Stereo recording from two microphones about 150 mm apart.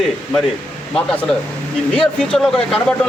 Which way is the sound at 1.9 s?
5° left (ahead or behind).